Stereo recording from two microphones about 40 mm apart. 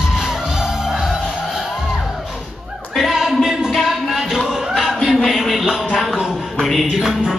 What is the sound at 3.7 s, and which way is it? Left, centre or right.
Music, centre.